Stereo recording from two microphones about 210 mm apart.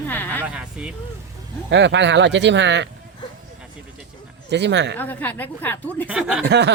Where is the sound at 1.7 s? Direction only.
55° right (ahead or behind).